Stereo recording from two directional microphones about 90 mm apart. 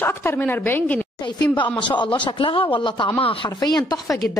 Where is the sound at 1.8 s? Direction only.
60° left (ahead or behind).